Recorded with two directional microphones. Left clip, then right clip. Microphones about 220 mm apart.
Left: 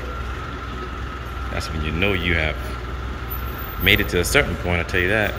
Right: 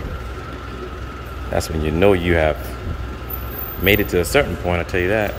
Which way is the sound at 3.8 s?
15° right (ahead or behind).